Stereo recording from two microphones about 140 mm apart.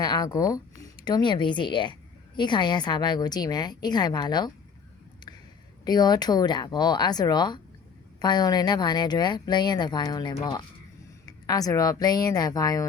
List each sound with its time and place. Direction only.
0.0 s speech: 30° left (ahead or behind)
5.8 s speech: 30° left (ahead or behind)